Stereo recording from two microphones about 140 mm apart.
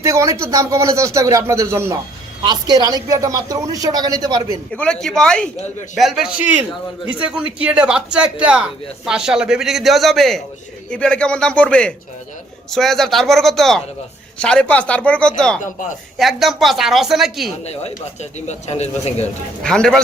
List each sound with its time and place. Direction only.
0.0 s speech: 20° right (ahead or behind)
2.4 s speech: 30° right (ahead or behind)
4.7 s a man's voice: 5° left (ahead or behind)
17.6 s speech: 50° left (ahead or behind)
19.6 s speech: 5° left (ahead or behind)